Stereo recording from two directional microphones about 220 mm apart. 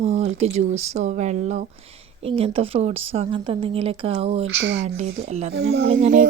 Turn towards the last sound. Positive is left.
turn(degrees=-35)  # may be behind; listen again after turning